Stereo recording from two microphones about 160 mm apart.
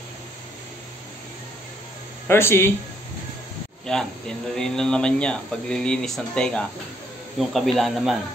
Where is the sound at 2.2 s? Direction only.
15° left (ahead or behind).